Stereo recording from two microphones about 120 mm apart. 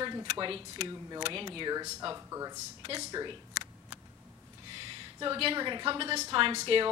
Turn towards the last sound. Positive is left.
turn(degrees=-50)  # may be behind; listen again after turning